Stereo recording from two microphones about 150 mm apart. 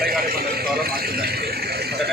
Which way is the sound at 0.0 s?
90° right.